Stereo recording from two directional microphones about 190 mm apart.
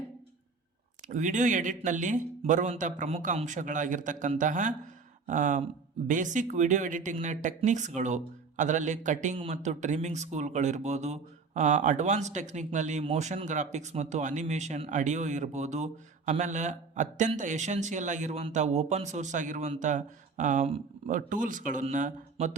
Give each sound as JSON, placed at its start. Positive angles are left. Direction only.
{"t": 1.1, "sound": "speech", "side_deg": -40}